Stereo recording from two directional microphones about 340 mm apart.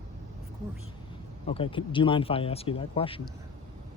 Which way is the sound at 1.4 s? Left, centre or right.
Centre.